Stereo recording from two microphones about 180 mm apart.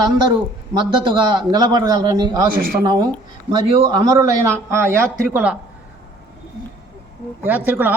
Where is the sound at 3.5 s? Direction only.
20° right (ahead or behind).